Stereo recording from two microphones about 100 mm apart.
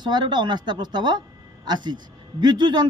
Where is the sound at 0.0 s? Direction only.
50° right (ahead or behind).